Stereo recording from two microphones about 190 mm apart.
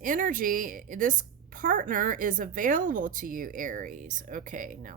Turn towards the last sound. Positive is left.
turn(degrees=-45)  # may be behind; listen again after turning